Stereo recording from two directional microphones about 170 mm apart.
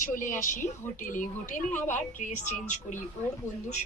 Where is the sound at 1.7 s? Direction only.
10° left (ahead or behind).